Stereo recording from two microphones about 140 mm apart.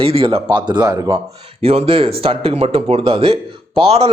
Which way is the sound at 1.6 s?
45° right (ahead or behind).